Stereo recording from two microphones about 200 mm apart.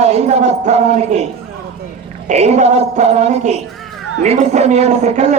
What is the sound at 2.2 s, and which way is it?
A man's voice, 35° right (ahead or behind).